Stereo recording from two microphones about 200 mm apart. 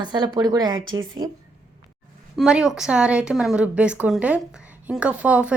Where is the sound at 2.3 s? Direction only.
5° right (ahead or behind).